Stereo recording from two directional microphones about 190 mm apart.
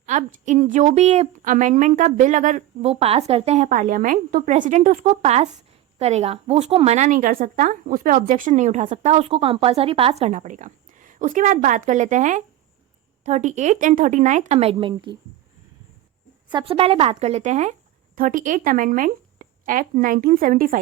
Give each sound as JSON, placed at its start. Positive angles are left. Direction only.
{"t": 0.0, "sound": "a sound", "side_deg": -40}
{"t": 0.4, "sound": "a woman's voice", "side_deg": -40}
{"t": 16.5, "sound": "a woman's voice", "side_deg": -25}